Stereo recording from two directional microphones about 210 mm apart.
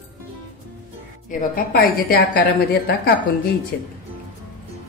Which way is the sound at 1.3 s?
40° left (ahead or behind).